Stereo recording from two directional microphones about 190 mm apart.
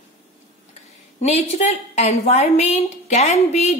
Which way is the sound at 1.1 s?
35° left (ahead or behind).